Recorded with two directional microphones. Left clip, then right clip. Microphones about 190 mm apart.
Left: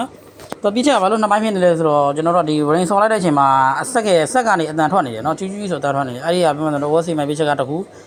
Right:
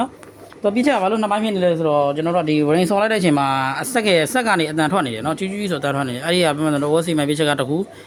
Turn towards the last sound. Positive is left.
turn(degrees=-20)  # may be behind; listen again after turning